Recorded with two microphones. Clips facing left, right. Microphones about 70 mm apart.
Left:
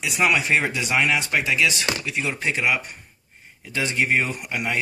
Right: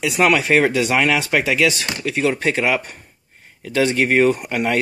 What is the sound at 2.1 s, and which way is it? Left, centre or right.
Speech, right.